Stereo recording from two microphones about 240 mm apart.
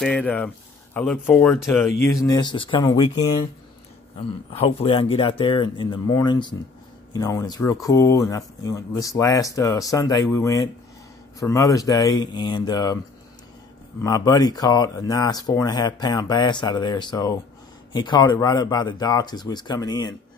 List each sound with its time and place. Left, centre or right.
0.0 s speech: centre; by 3.4 s left
4.5 s speech: left
14.0 s speech: centre